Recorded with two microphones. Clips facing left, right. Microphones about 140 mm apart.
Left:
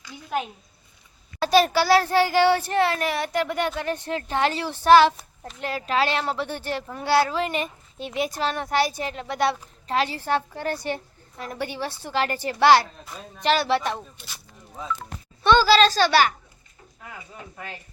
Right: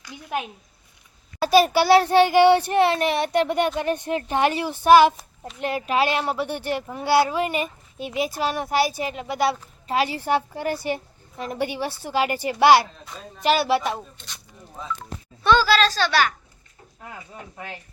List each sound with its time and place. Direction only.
0.1 s speech: 20° right (ahead or behind)
1.4 s a child's voice: 5° right (ahead or behind)
1.8 s speech: 20° right (ahead or behind)
11.3 s speech: 20° right (ahead or behind)
15.4 s a woman's voice: centre (ahead or behind)